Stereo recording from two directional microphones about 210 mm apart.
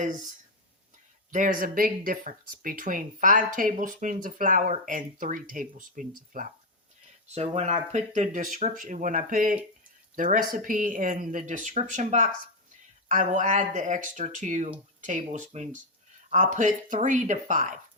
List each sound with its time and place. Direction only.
1.3 s speech: 40° right (ahead or behind)
7.5 s speech: 30° right (ahead or behind)